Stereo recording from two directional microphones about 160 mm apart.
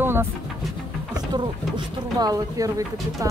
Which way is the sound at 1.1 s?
25° right (ahead or behind).